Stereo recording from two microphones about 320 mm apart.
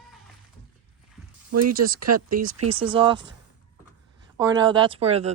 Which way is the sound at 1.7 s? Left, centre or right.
Right.